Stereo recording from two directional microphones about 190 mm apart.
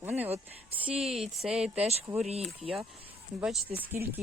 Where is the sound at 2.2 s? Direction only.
35° right (ahead or behind).